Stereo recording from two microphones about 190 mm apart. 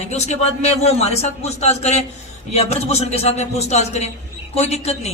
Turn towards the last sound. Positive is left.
turn(degrees=35)  # may be behind; listen again after turning